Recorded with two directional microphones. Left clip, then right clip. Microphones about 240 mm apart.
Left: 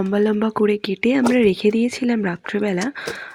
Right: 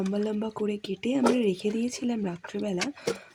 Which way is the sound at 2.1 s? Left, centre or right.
Centre.